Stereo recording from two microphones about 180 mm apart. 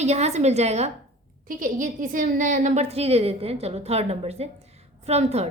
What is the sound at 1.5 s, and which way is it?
A woman's voice, 50° right (ahead or behind).